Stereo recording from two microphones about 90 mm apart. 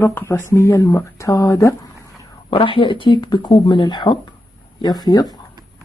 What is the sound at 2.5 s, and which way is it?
Speech, 75° left (ahead or behind).